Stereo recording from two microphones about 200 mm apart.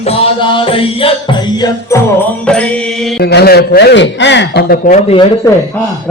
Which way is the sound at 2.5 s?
5° left (ahead or behind).